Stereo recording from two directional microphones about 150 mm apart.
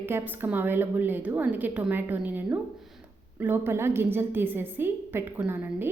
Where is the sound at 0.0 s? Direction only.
15° right (ahead or behind).